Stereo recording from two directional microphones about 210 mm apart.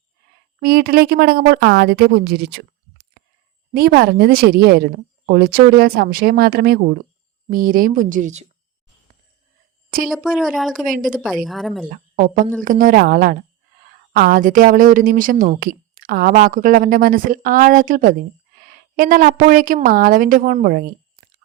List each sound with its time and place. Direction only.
0.6 s a woman's voice: 50° right (ahead or behind)
10.1 s speech: centre (ahead or behind)
11.9 s a woman's voice: 40° right (ahead or behind)